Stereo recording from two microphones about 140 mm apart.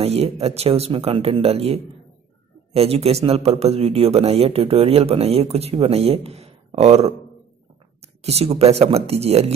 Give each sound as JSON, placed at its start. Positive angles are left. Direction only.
{"t": 0.0, "sound": "speech", "side_deg": -45}
{"t": 8.2, "sound": "speech", "side_deg": -50}